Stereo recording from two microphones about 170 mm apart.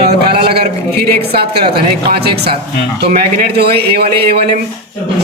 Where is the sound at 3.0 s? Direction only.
70° right (ahead or behind).